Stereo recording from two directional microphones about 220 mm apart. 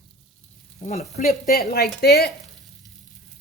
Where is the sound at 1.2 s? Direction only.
45° left (ahead or behind).